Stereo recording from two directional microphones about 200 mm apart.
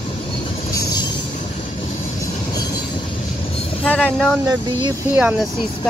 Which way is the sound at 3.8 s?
5° left (ahead or behind).